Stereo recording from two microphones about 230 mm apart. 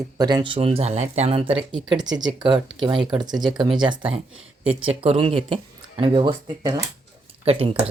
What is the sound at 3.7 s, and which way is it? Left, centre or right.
Speech, right.